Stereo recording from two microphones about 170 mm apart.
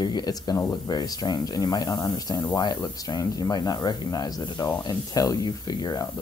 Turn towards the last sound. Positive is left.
turn(degrees=20)  # may be behind; listen again after turning